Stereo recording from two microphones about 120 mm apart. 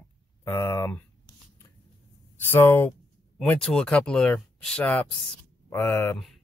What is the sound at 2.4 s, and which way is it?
Speech, 20° left (ahead or behind).